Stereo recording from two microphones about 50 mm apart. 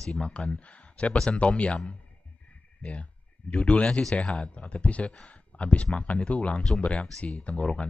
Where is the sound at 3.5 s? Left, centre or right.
Left.